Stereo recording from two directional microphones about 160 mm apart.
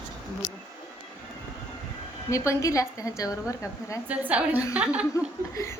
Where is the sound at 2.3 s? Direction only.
20° left (ahead or behind).